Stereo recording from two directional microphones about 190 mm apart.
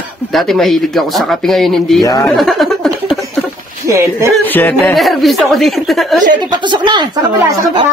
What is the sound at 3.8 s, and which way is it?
Speech, 15° right (ahead or behind).